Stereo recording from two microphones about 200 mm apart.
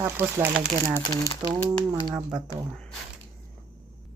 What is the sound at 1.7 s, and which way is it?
Speech, 20° right (ahead or behind).